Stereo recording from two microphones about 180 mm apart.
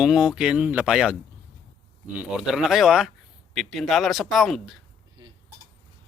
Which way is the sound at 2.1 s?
5° right (ahead or behind).